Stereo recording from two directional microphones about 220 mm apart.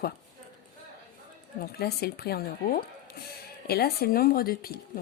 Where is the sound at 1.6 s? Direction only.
45° left (ahead or behind).